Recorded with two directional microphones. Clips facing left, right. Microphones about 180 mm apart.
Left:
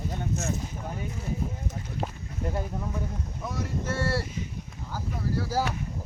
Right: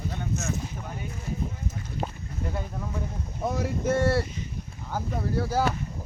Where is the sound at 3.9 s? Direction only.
55° right (ahead or behind).